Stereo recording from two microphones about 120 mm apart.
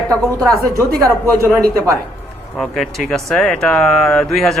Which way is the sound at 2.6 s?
Centre (ahead or behind).